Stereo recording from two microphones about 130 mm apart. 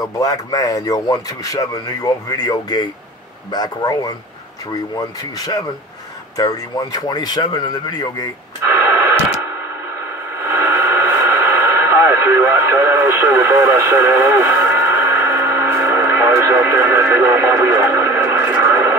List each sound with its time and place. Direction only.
0.0 s speech: 30° left (ahead or behind)
8.6 s radio: 20° right (ahead or behind)